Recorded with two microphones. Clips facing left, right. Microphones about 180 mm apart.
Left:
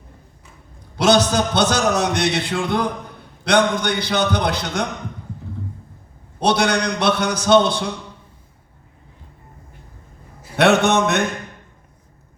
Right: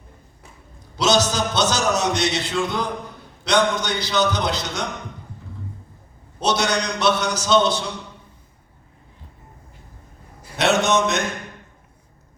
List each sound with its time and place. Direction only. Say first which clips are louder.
0.9 s a man's voice: left 4 dB; 60° left (ahead or behind)
6.4 s a man's voice: left 3 dB; 60° left (ahead or behind)
10.6 s a man's voice: left 4 dB; 60° left (ahead or behind)